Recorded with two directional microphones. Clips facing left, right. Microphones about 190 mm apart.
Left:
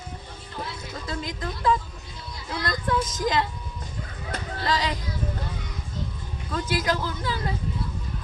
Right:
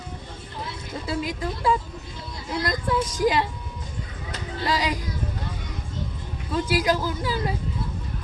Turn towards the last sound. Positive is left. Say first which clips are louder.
# right 3 dB
turn(degrees=-10)  # may be behind; listen again after turning